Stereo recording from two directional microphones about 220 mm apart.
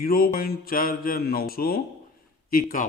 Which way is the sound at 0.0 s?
45° left (ahead or behind).